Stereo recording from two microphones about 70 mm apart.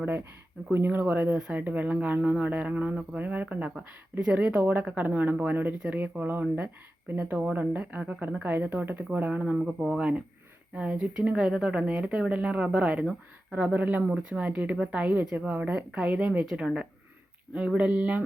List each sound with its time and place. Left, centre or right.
0.7 s speech: right
9.6 s speech: centre
16.5 s speech: centre
17.7 s speech: centre